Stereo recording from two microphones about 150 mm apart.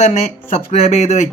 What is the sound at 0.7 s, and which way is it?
Speech, 45° left (ahead or behind).